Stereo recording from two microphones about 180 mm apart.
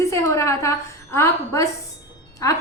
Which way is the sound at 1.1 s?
15° left (ahead or behind).